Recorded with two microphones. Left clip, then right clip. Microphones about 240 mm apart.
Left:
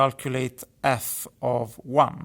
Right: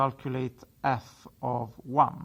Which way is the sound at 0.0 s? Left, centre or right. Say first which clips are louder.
Left 6 dB; left.